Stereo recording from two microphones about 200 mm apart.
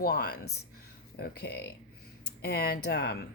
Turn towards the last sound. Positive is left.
turn(degrees=55)  # may be behind; listen again after turning